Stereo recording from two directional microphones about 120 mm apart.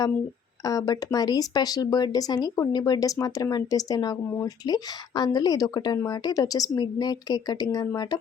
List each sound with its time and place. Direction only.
0.6 s speech: 30° left (ahead or behind)